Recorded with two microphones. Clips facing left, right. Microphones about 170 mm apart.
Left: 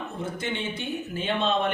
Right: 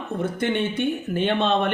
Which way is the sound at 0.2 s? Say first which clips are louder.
Right 8 dB; 60° right (ahead or behind).